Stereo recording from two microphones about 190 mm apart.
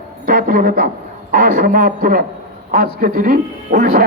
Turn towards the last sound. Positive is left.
turn(degrees=-50)  # may be behind; listen again after turning